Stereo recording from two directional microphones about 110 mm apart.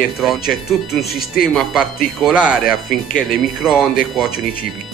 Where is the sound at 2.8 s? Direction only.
5° left (ahead or behind).